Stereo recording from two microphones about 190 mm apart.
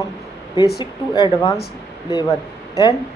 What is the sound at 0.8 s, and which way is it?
Speech, 20° left (ahead or behind).